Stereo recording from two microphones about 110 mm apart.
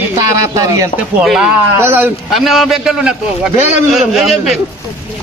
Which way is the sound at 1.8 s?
15° right (ahead or behind).